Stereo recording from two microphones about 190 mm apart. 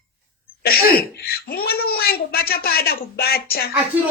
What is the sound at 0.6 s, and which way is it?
Speech, 55° left (ahead or behind).